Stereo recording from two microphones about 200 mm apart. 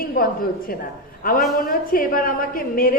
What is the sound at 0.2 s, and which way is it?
A woman's voice, 45° left (ahead or behind).